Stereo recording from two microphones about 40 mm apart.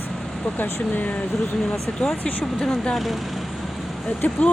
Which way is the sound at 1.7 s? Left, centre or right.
Left.